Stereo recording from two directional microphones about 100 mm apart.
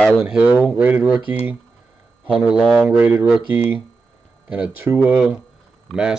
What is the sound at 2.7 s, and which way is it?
Speech, 15° right (ahead or behind).